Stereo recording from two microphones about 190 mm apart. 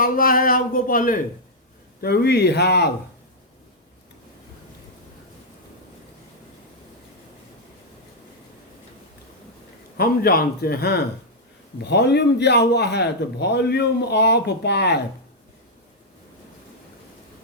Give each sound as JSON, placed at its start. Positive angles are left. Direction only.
{"t": 0.0, "sound": "a man's voice", "side_deg": 45}
{"t": 10.0, "sound": "a man's voice", "side_deg": 50}